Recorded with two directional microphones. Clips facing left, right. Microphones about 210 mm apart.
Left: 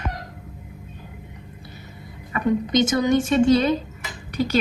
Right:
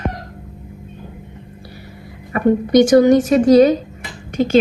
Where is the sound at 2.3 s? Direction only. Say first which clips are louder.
Right 6 dB; 50° right (ahead or behind).